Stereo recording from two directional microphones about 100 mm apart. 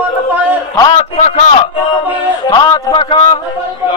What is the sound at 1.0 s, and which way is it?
Speech, 90° left.